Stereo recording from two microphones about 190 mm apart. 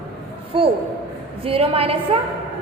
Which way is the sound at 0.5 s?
30° right (ahead or behind).